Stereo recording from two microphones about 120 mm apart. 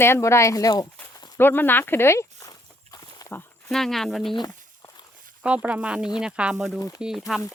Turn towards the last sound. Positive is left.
turn(degrees=0)  # may be behind; listen again after turning